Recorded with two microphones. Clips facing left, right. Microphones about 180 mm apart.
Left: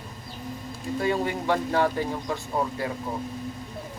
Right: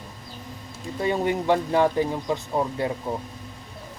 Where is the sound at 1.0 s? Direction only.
20° right (ahead or behind).